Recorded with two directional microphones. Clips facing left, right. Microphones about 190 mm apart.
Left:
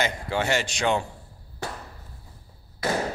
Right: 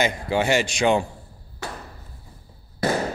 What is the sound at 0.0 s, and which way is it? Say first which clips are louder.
A man's voice: right 4 dB; 10° right (ahead or behind).